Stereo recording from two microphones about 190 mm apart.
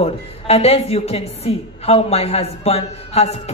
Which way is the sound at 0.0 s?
35° left (ahead or behind).